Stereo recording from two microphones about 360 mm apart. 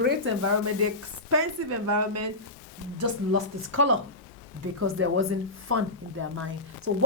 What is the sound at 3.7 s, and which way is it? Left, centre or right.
Speech, right.